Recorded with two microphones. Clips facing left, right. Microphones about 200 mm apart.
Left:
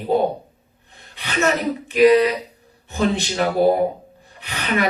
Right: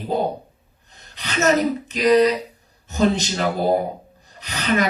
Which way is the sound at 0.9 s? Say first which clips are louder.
Left 1 dB; 40° right (ahead or behind).